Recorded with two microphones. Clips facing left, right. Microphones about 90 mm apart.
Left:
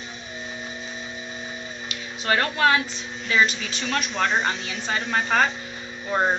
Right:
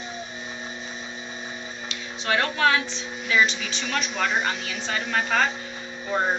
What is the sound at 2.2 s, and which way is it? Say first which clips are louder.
A woman's voice: left 1 dB; centre (ahead or behind).